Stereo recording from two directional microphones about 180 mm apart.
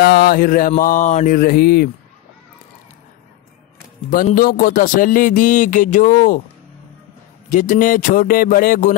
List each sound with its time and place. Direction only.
0.0 s a man's voice: 60° left (ahead or behind)
4.1 s a man's voice: 50° left (ahead or behind)
7.5 s a man's voice: 45° left (ahead or behind)